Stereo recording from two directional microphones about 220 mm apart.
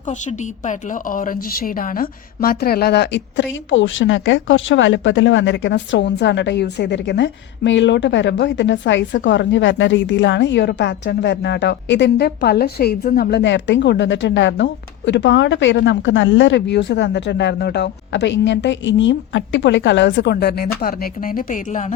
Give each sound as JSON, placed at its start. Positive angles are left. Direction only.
{"t": 0.1, "sound": "a woman's voice", "side_deg": 35}